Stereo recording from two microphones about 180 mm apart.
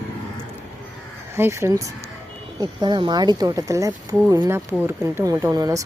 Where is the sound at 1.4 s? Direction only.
15° right (ahead or behind).